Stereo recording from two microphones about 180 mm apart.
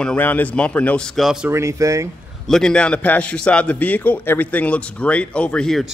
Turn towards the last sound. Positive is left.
turn(degrees=5)  # may be behind; listen again after turning